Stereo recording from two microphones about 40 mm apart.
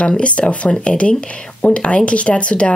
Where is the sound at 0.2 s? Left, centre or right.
Left.